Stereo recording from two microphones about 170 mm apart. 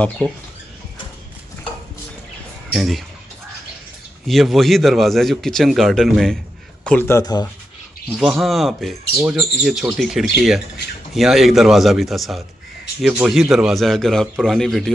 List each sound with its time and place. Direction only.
2.7 s a man's voice: centre (ahead or behind)
4.3 s a man's voice: centre (ahead or behind); by 7.4 s 20° left (ahead or behind)
8.1 s a man's voice: 5° right (ahead or behind)